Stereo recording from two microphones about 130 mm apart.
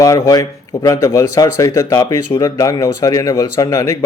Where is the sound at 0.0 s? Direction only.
25° left (ahead or behind).